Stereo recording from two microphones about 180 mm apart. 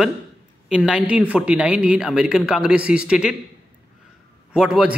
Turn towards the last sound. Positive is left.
turn(degrees=-5)  # may be behind; listen again after turning